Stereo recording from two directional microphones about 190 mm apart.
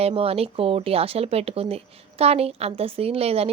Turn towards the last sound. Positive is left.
turn(degrees=-30)  # may be behind; listen again after turning